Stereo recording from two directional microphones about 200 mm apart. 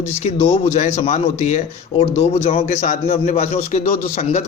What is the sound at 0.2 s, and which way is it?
A man's voice, 35° left (ahead or behind).